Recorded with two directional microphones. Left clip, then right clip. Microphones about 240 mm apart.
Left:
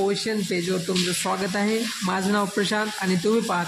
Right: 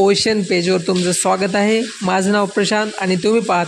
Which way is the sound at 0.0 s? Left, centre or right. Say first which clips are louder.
Right 10 dB; right.